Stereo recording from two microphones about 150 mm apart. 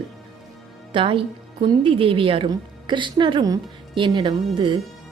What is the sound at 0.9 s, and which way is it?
A woman's voice, 35° right (ahead or behind).